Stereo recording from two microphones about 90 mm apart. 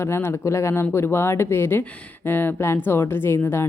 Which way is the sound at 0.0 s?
30° left (ahead or behind).